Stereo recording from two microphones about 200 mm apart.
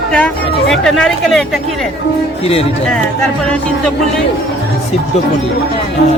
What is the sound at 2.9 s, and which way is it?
Speech, 5° left (ahead or behind).